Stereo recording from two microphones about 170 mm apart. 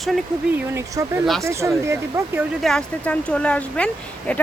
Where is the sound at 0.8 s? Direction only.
15° right (ahead or behind).